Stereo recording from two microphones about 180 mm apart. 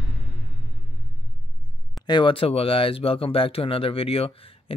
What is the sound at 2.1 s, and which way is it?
Speech, 30° left (ahead or behind).